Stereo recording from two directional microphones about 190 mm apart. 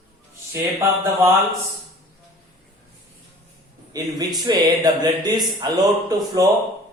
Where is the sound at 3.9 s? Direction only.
20° right (ahead or behind).